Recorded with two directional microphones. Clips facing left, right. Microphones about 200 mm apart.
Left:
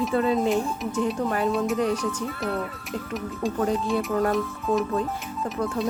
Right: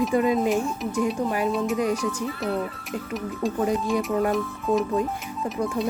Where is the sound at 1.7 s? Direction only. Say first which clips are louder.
Even; 10° right (ahead or behind).